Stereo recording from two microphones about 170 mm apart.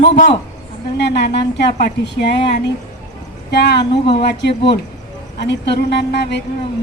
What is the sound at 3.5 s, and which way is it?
Speech, 80° left.